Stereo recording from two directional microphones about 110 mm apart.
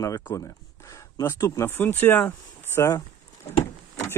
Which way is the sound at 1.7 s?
20° left (ahead or behind).